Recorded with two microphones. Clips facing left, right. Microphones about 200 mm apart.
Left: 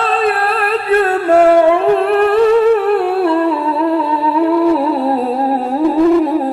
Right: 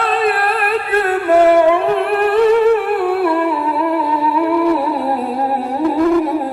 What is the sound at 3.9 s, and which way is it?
Music, 25° left (ahead or behind).